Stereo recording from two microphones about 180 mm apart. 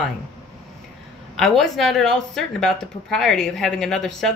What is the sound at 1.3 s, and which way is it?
A woman's voice, centre (ahead or behind).